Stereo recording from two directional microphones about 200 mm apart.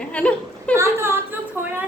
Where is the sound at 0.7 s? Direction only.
15° right (ahead or behind).